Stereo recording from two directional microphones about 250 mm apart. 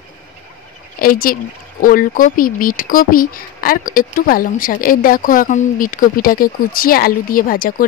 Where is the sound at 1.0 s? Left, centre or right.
Left.